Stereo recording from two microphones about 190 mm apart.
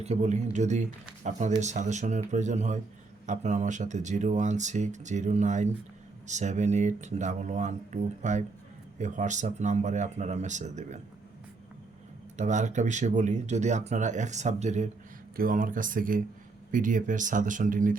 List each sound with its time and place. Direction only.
0.0 s speech: 35° right (ahead or behind)
12.4 s speech: 40° right (ahead or behind)
15.4 s speech: 45° right (ahead or behind)